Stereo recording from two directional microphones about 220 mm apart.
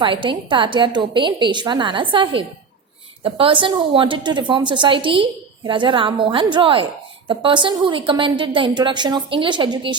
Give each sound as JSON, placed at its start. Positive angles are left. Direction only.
{"t": 0.0, "sound": "a woman's voice", "side_deg": -20}